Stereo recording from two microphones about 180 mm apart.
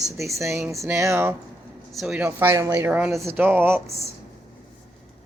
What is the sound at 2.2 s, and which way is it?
Speech, 15° right (ahead or behind).